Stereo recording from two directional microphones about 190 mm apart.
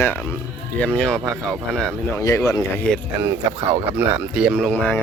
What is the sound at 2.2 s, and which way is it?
Speech, 15° left (ahead or behind).